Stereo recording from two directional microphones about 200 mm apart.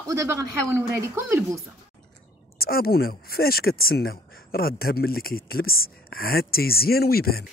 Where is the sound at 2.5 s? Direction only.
50° left (ahead or behind).